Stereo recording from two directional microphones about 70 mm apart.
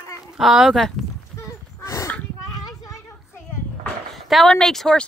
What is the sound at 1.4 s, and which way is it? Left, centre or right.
Horse, left.